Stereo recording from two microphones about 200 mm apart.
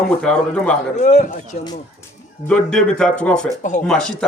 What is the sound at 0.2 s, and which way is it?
Speech, 5° left (ahead or behind).